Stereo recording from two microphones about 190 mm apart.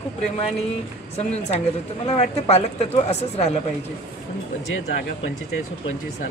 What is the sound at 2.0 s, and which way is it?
Speech, 35° left (ahead or behind).